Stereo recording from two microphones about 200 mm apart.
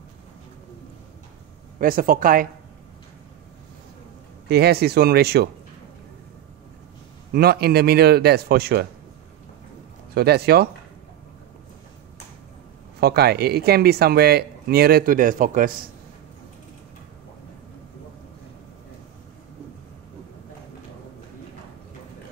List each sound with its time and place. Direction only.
1.8 s speech: 45° right (ahead or behind)
4.5 s speech: 55° right (ahead or behind)
7.3 s speech: 50° right (ahead or behind)
10.1 s speech: 55° right (ahead or behind)
13.0 s speech: 50° right (ahead or behind)